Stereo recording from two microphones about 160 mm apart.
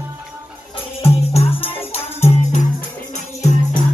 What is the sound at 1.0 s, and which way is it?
Music, 40° left (ahead or behind).